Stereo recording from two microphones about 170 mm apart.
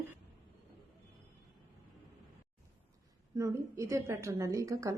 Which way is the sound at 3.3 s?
20° right (ahead or behind).